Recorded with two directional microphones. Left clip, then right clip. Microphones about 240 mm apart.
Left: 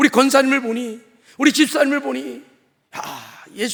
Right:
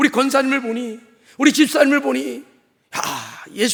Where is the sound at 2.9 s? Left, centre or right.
Right.